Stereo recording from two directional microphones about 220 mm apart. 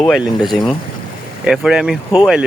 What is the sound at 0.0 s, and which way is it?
Speech, centre (ahead or behind).